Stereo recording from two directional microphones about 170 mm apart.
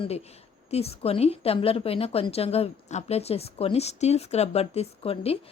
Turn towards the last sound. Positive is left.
turn(degrees=35)  # may be behind; listen again after turning